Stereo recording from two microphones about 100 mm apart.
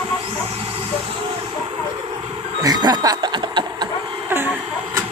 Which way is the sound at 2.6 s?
40° right (ahead or behind).